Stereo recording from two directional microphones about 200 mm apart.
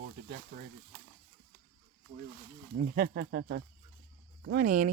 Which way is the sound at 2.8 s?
50° right (ahead or behind).